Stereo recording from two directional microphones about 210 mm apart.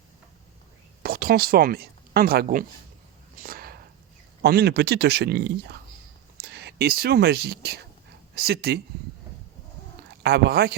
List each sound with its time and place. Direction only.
1.0 s speech: 45° right (ahead or behind)
3.4 s a sound: 45° right (ahead or behind)
4.4 s speech: 50° right (ahead or behind)
10.2 s speech: 50° right (ahead or behind)